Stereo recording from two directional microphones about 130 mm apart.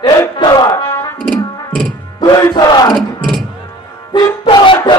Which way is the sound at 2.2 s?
30° left (ahead or behind).